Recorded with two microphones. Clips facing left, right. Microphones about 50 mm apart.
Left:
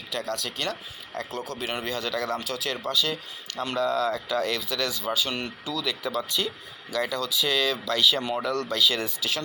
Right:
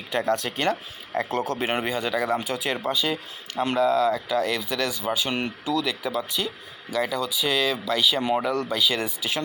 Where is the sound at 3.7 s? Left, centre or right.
Centre.